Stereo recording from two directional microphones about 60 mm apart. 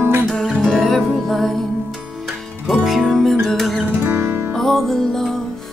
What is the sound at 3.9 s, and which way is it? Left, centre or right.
Music, right.